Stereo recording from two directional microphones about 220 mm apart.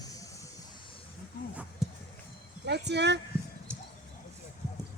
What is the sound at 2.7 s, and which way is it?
Speech, 50° right (ahead or behind).